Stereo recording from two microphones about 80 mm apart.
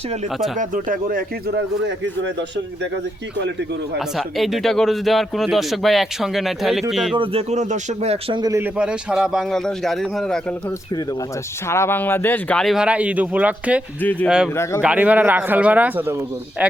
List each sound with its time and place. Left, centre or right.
0.3 s a man's voice: centre
3.9 s a man's voice: centre
8.8 s speech: centre
9.6 s a man's voice: centre
11.7 s speech: left
12.7 s speech: centre
14.0 s speech: left
14.3 s speech: centre
14.5 s speech: left
14.8 s speech: centre